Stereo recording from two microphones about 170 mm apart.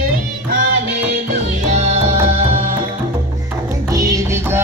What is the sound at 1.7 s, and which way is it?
Music, 40° right (ahead or behind).